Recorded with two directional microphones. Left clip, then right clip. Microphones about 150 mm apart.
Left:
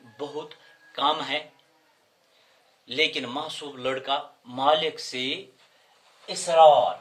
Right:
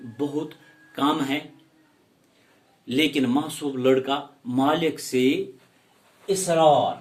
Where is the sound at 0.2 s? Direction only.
25° left (ahead or behind).